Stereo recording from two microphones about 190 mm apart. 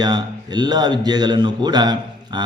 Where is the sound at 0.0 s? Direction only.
20° right (ahead or behind).